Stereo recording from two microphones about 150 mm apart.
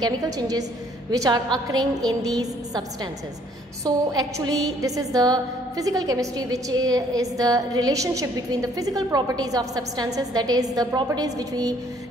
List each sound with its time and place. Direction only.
0.0 s a woman's voice: 25° right (ahead or behind)